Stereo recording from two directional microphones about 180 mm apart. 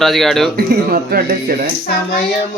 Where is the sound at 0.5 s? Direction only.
55° right (ahead or behind).